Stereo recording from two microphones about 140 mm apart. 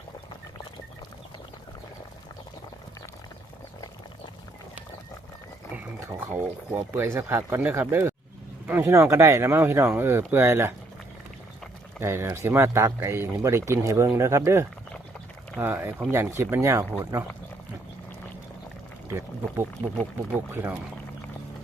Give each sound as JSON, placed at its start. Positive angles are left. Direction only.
{"t": 5.7, "sound": "speech", "side_deg": -15}
{"t": 11.9, "sound": "speech", "side_deg": -20}
{"t": 19.0, "sound": "speech", "side_deg": -20}